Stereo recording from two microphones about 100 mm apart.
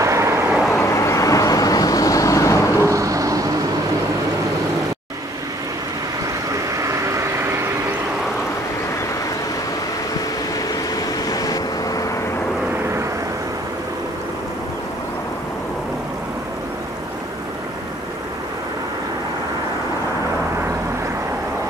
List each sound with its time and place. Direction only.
0.0 s vehicle: 30° right (ahead or behind)
0.7 s vehicle: 25° left (ahead or behind)
2.9 s vehicle: 35° right (ahead or behind)
6.8 s a sound: 30° right (ahead or behind)
11.2 s vehicle: 40° left (ahead or behind)